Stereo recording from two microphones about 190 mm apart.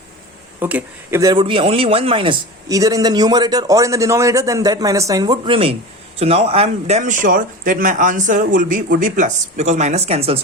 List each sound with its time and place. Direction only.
0.6 s speech: 10° right (ahead or behind); by 10.4 s 30° right (ahead or behind)